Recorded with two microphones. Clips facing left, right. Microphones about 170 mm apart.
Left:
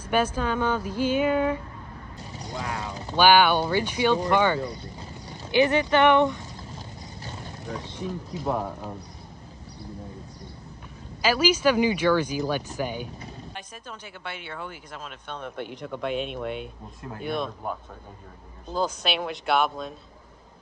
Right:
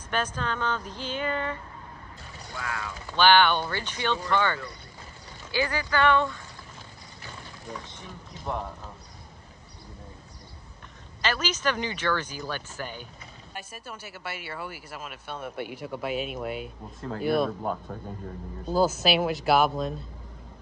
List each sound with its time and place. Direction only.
0.1 s speech: 10° left (ahead or behind)
2.5 s speech: 20° left (ahead or behind)
3.2 s speech: 10° left (ahead or behind)
8.0 s speech: 5° left (ahead or behind)
11.2 s speech: 10° left (ahead or behind)
13.6 s speech: 5° right (ahead or behind)